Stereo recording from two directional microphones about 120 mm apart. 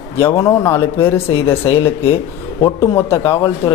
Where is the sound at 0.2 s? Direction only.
20° left (ahead or behind).